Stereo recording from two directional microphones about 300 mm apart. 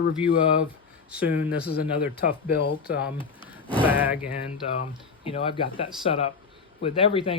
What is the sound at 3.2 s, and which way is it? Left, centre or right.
Speech, centre.